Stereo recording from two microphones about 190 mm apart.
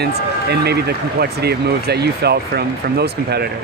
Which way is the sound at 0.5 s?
60° right (ahead or behind).